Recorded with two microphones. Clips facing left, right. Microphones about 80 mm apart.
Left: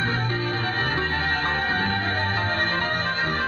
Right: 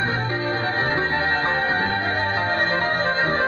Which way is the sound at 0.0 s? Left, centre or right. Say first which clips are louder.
Right 2 dB; right.